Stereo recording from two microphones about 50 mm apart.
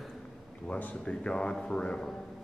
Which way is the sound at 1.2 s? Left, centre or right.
Centre.